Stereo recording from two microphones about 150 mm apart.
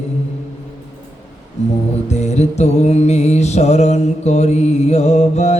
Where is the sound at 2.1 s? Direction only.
50° left (ahead or behind).